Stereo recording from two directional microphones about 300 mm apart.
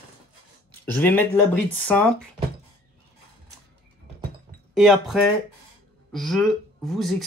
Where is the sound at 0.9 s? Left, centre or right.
Centre.